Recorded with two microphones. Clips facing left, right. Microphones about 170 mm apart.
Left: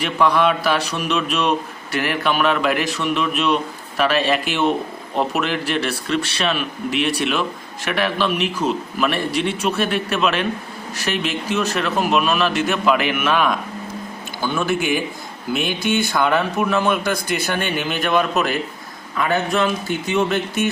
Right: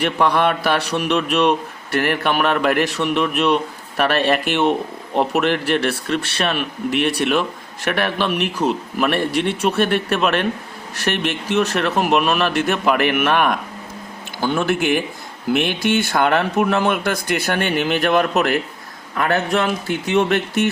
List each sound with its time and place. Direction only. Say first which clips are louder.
0.0 s a man's voice: even; 55° right (ahead or behind)